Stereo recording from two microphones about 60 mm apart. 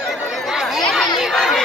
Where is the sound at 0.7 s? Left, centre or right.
Centre.